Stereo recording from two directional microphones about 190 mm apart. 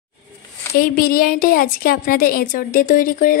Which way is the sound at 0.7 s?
50° left (ahead or behind).